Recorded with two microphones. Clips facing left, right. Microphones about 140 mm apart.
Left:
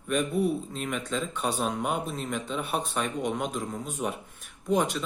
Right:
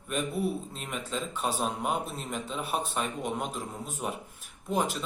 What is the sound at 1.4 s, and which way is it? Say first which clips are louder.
Speech: left 1 dB; 5° right (ahead or behind).